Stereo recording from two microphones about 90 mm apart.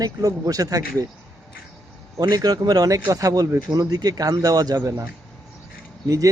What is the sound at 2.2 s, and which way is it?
Speech, 45° right (ahead or behind).